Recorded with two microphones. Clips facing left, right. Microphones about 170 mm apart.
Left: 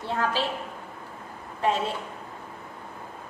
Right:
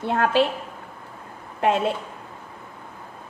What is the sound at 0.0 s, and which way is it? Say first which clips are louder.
Speech: right 6 dB; 60° right (ahead or behind).